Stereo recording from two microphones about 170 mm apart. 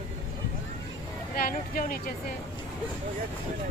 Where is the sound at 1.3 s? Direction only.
55° left (ahead or behind).